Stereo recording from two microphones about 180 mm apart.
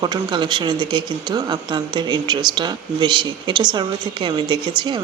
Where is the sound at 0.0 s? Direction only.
25° right (ahead or behind).